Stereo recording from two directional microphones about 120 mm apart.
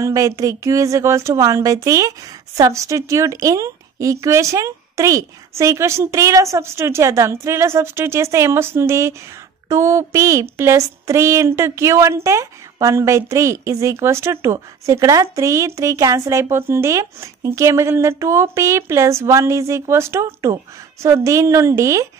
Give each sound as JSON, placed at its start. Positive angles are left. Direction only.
{"t": 0.0, "sound": "speech", "side_deg": -25}